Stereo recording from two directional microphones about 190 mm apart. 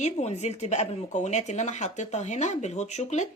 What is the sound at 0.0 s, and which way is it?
Speech, 35° left (ahead or behind).